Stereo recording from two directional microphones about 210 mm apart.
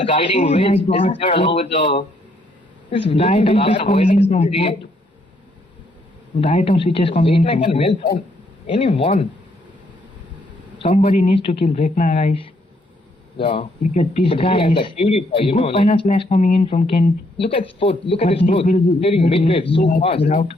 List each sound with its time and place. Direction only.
0.0 s speech: 25° left (ahead or behind)
6.4 s speech: 30° left (ahead or behind)
10.8 s speech: 30° left (ahead or behind)